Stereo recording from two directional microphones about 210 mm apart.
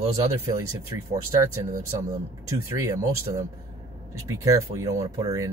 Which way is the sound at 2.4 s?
15° right (ahead or behind).